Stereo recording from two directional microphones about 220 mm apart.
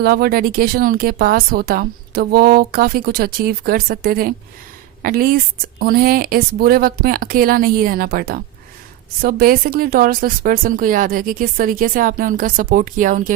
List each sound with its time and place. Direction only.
0.0 s speech: 45° right (ahead or behind)